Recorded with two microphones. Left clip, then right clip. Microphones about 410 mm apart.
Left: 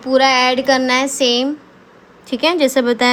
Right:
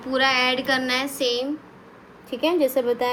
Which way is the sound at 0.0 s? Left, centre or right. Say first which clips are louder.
Left 8 dB; centre.